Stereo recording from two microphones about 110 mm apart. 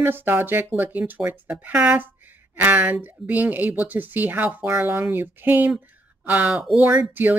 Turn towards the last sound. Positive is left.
turn(degrees=-15)  # may be behind; listen again after turning